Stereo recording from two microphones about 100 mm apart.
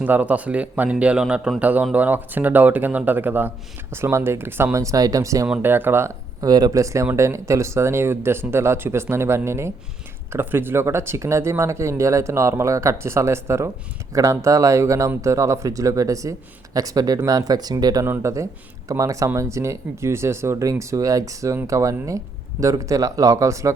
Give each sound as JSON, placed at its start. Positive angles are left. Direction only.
{"t": 0.0, "sound": "a man's voice", "side_deg": -15}
{"t": 5.6, "sound": "speech", "side_deg": -20}
{"t": 6.4, "sound": "speech", "side_deg": -40}
{"t": 18.0, "sound": "speech", "side_deg": -25}